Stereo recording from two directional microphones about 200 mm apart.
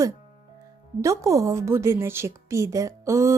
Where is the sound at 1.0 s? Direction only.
15° right (ahead or behind).